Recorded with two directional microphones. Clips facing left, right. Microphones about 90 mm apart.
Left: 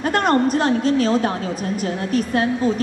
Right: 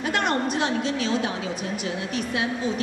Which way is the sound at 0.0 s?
45° left (ahead or behind).